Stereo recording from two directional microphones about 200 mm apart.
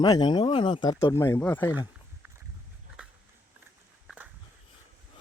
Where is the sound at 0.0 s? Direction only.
20° left (ahead or behind).